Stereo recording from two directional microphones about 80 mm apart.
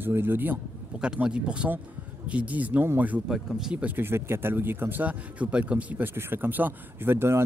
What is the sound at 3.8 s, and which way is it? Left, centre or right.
Speech, right.